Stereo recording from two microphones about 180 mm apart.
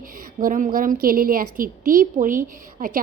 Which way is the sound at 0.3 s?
45° right (ahead or behind).